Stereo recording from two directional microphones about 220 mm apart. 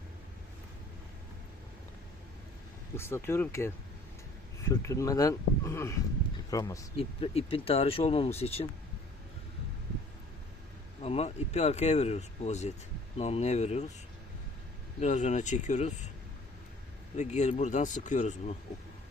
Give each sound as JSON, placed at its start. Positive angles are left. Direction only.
{"t": 2.9, "sound": "speech", "side_deg": 10}
{"t": 4.7, "sound": "speech", "side_deg": 15}
{"t": 6.9, "sound": "speech", "side_deg": 25}
{"t": 11.0, "sound": "speech", "side_deg": 30}
{"t": 15.0, "sound": "speech", "side_deg": 35}
{"t": 17.2, "sound": "speech", "side_deg": 30}